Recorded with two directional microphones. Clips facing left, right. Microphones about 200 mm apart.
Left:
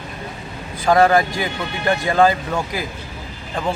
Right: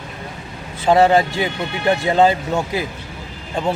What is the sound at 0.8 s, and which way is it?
Speech, 25° right (ahead or behind).